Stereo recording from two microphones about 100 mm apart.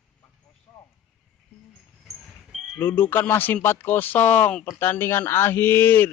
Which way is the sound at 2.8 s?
20° left (ahead or behind).